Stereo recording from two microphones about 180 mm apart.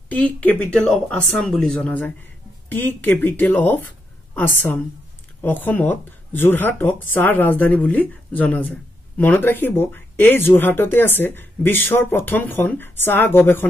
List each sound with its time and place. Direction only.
0.1 s speech: 10° left (ahead or behind)